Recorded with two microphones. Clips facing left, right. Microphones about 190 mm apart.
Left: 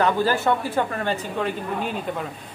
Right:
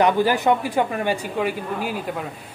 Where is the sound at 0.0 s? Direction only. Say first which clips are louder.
Right 3 dB; 15° right (ahead or behind).